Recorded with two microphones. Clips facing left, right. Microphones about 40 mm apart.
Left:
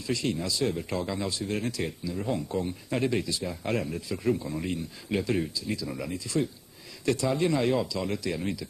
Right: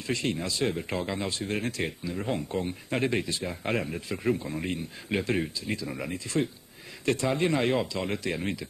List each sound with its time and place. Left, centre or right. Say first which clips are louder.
0.0 s speech: even; right